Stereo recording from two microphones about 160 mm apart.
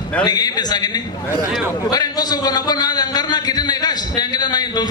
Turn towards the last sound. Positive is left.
turn(degrees=25)  # may be behind; listen again after turning